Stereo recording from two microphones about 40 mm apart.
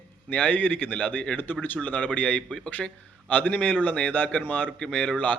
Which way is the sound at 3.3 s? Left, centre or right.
Left.